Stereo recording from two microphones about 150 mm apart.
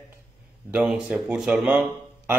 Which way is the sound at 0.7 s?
10° right (ahead or behind).